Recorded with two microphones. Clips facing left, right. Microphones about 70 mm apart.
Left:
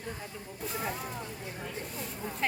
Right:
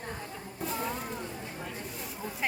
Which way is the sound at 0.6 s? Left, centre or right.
Centre.